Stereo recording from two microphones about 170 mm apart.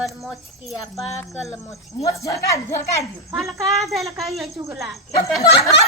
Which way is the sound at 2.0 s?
20° left (ahead or behind).